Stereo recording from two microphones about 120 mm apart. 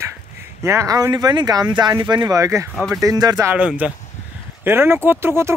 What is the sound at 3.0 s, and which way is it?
Speech, 35° right (ahead or behind).